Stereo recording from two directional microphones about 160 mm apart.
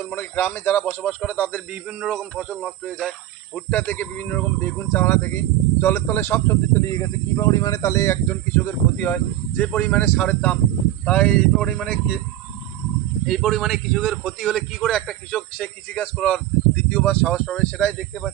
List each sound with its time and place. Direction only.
0.0 s speech: 15° left (ahead or behind)
13.2 s a man's voice: 5° left (ahead or behind)